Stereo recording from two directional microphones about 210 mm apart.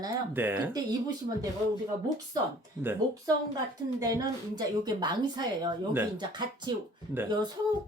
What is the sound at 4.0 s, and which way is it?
A woman's voice, 15° right (ahead or behind).